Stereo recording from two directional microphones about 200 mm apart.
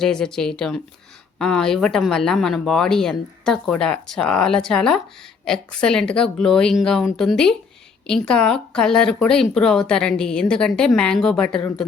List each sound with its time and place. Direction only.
0.0 s speech: 5° left (ahead or behind)